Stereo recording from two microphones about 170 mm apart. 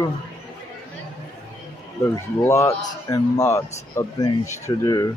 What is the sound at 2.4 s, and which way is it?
A man's voice, 15° left (ahead or behind).